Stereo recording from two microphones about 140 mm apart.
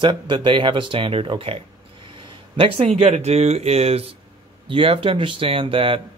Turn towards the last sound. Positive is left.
turn(degrees=-40)  # may be behind; listen again after turning